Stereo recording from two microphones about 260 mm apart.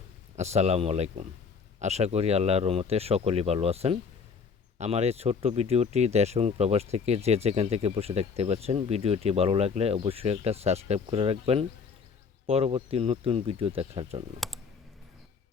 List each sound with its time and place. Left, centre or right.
0.3 s speech: right